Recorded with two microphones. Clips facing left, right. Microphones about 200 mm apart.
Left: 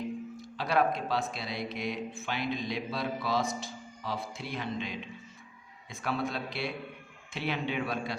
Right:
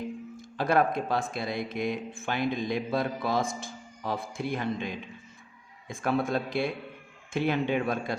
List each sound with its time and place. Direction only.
0.3 s speech: 50° right (ahead or behind)